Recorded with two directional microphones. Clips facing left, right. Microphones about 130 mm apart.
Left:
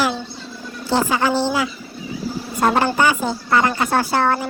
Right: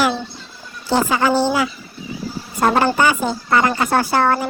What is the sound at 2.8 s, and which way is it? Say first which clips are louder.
A woman's voice: right 1 dB; 70° right (ahead or behind).